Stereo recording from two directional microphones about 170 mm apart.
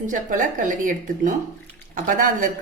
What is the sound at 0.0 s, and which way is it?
A woman's voice, 50° right (ahead or behind).